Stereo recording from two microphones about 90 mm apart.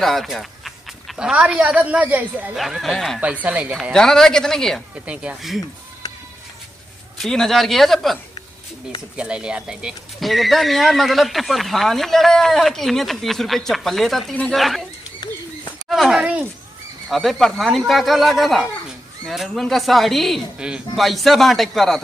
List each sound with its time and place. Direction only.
0.0 s speech: centre (ahead or behind); by 2.5 s 20° right (ahead or behind)
2.5 s speech: centre (ahead or behind)
3.4 s speech: 15° right (ahead or behind)
3.9 s speech: 5° left (ahead or behind)
5.0 s speech: 10° right (ahead or behind)
7.2 s speech: 5° left (ahead or behind)
9.1 s speech: 10° right (ahead or behind)
15.9 s speech: 5° right (ahead or behind)
20.5 s speech: 10° right (ahead or behind)
20.9 s speech: centre (ahead or behind)